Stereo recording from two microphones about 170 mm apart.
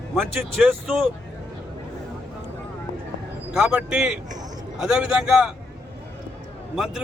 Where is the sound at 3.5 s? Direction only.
5° right (ahead or behind).